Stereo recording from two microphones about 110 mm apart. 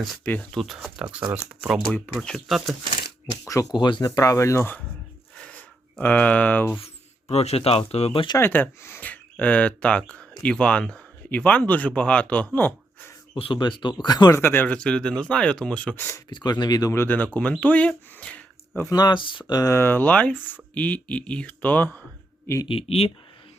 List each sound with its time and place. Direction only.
0.5 s speech: centre (ahead or behind)
2.1 s speech: 5° left (ahead or behind)
3.5 s speech: 35° left (ahead or behind); by 4.9 s 20° left (ahead or behind)
5.4 s a sound: 15° left (ahead or behind)
6.7 s speech: 70° left (ahead or behind)
8.4 s speech: 20° left (ahead or behind)
12.5 s a sound: 15° left (ahead or behind)
13.3 s speech: 45° left (ahead or behind)
14.3 s speech: 20° left (ahead or behind)
16.3 s speech: 40° left (ahead or behind)
16.9 s speech: 20° left (ahead or behind)
18.9 s speech: 40° left (ahead or behind); by 22.0 s 15° left (ahead or behind)
22.6 s speech: 60° left (ahead or behind)